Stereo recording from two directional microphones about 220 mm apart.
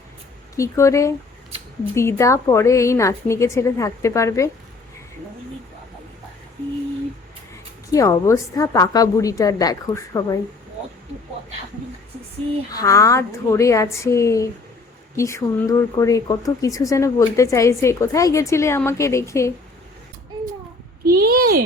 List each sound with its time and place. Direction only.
0.5 s speech: 15° left (ahead or behind)
7.5 s speech: 15° left (ahead or behind)
12.7 s speech: 15° left (ahead or behind)
21.1 s a child's voice: 40° right (ahead or behind)